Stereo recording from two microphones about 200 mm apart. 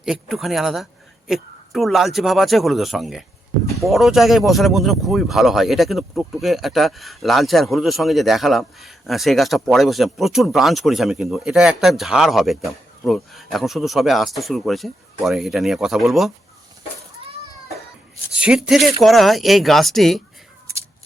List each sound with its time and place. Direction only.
0.0 s speech: centre (ahead or behind)
18.3 s speech: 5° right (ahead or behind)